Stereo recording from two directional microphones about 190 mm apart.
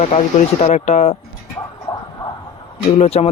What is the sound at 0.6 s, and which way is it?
Speech, 35° left (ahead or behind).